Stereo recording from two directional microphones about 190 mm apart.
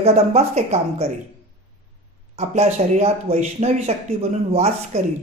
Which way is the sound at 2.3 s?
35° right (ahead or behind).